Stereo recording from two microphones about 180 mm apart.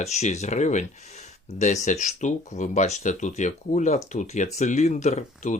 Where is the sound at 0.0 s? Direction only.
40° left (ahead or behind).